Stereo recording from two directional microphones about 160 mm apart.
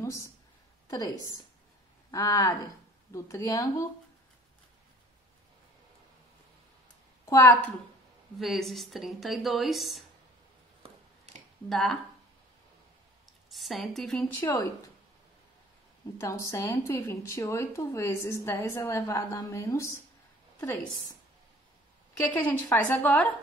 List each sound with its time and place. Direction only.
0.0 s a woman's voice: 20° left (ahead or behind)
7.2 s speech: 15° left (ahead or behind)
8.4 s speech: centre (ahead or behind)
11.7 s speech: centre (ahead or behind)
13.5 s speech: centre (ahead or behind)
16.2 s speech: 20° left (ahead or behind)
22.1 s speech: 10° left (ahead or behind)